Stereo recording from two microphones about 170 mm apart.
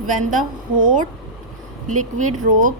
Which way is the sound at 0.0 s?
50° right (ahead or behind).